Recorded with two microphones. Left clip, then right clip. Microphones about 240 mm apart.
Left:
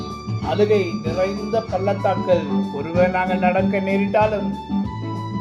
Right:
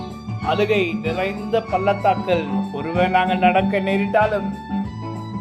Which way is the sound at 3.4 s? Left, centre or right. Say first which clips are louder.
Right 2 dB; right.